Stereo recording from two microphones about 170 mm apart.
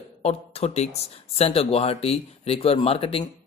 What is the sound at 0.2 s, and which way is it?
Speech, 40° left (ahead or behind).